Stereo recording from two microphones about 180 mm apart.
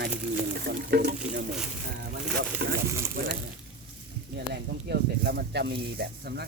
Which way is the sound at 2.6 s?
60° right (ahead or behind).